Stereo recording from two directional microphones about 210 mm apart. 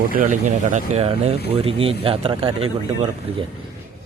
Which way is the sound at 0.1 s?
40° right (ahead or behind).